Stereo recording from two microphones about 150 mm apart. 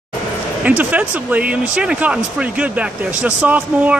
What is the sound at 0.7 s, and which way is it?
Speech, 10° right (ahead or behind).